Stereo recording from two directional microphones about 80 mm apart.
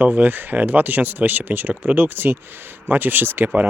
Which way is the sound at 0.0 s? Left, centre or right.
Right.